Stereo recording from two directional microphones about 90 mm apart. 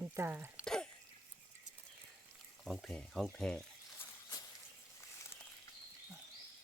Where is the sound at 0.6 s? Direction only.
5° left (ahead or behind).